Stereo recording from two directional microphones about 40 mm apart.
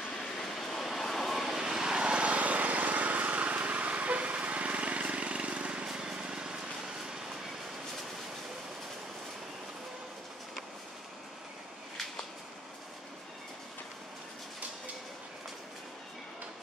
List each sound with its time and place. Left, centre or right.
0.2 s vehicle: centre
1.6 s vehicle: centre